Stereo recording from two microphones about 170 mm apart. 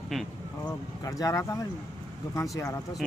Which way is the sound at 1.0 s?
20° left (ahead or behind).